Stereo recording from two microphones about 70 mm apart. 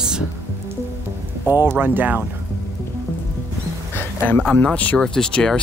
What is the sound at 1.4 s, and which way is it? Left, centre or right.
Speech, right.